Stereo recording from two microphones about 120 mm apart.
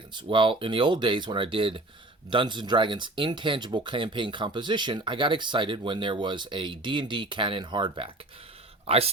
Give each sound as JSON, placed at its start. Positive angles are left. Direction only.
{"t": 0.1, "sound": "speech", "side_deg": -40}